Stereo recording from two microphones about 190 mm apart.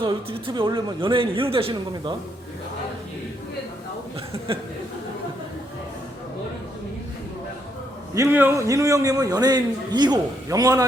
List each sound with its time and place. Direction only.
0.0 s a man's voice: 25° right (ahead or behind)
4.5 s a man's voice: 30° right (ahead or behind)
8.1 s a man's voice: 15° right (ahead or behind)